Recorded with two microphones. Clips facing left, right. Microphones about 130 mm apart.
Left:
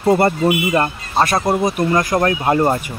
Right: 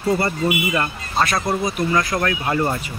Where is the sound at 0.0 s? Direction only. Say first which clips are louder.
Left 6 dB; 50° left (ahead or behind).